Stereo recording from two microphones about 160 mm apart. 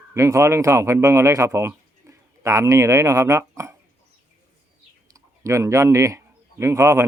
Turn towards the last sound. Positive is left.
turn(degrees=-20)  # may be behind; listen again after turning